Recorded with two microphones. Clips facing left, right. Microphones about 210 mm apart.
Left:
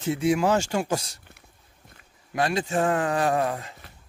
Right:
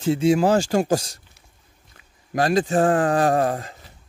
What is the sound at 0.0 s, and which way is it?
Speech, 30° right (ahead or behind).